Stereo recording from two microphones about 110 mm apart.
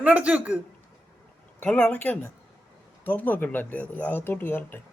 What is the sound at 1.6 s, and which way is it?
Speech, 10° left (ahead or behind).